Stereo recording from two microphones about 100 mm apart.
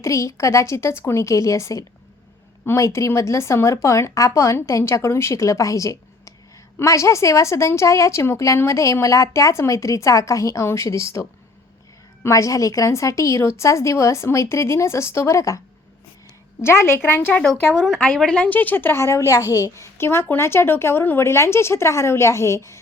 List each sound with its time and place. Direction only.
0.0 s a woman's voice: 30° left (ahead or behind)
17.4 s a woman's voice: centre (ahead or behind); by 22.8 s 30° left (ahead or behind)